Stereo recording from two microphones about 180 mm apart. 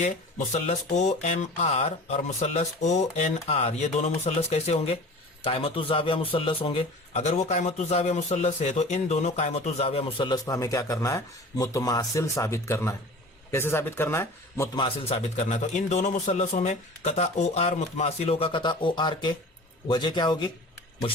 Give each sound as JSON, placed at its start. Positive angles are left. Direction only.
{"t": 0.0, "sound": "a man's voice", "side_deg": 40}
{"t": 14.8, "sound": "a man's voice", "side_deg": 30}